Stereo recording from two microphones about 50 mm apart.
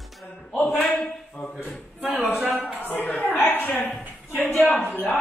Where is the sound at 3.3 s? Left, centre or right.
Left.